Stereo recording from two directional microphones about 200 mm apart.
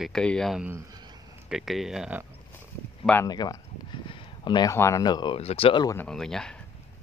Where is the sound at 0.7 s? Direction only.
20° right (ahead or behind).